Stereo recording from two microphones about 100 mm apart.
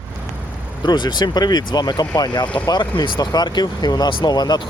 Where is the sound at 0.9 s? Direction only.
45° left (ahead or behind).